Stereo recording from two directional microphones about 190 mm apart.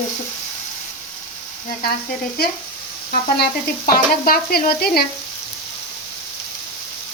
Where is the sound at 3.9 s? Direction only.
50° left (ahead or behind).